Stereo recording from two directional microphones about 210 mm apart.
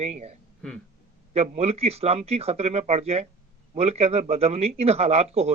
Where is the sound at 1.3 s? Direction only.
30° right (ahead or behind).